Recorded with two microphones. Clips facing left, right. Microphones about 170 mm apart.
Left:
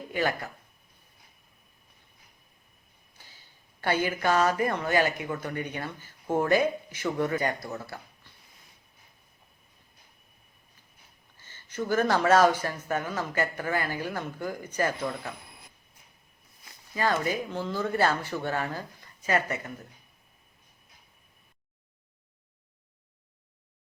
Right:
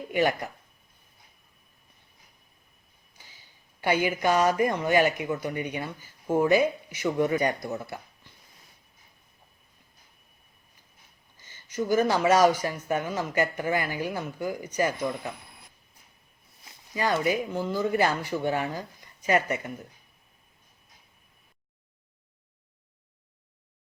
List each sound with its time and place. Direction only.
0.1 s speech: 20° right (ahead or behind)
3.2 s a sound: 15° right (ahead or behind)
4.6 s speech: 15° right (ahead or behind)
11.3 s speech: 15° right (ahead or behind)
16.9 s speech: 15° right (ahead or behind)